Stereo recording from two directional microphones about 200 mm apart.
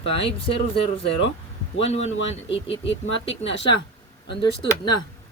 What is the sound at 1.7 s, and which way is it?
Speech, 30° left (ahead or behind).